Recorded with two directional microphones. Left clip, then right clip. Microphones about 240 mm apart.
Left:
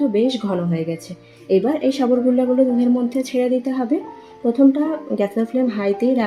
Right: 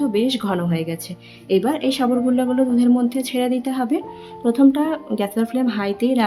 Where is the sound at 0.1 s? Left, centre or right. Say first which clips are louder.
Left 1 dB; centre.